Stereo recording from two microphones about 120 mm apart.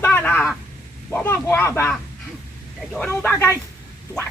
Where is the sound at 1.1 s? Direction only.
20° left (ahead or behind).